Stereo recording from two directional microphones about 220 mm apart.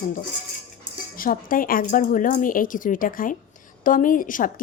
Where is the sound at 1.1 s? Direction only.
40° left (ahead or behind).